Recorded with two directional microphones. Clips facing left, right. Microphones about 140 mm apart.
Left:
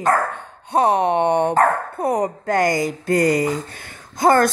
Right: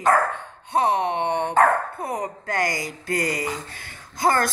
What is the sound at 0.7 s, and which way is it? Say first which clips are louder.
Speech: left 5 dB; 40° left (ahead or behind).